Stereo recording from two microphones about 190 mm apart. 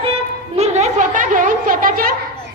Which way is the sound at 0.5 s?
35° right (ahead or behind).